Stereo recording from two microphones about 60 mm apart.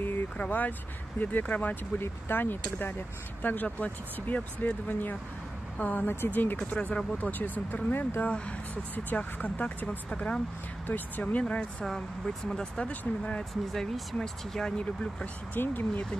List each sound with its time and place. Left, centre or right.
0.0 s speech: left
6.9 s speech: centre
7.2 s speech: left
10.9 s speech: left
12.4 s speech: centre
13.7 s speech: centre
15.5 s speech: left